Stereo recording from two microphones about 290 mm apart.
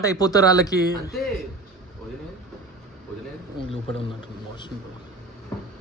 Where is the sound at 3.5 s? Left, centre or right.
Centre.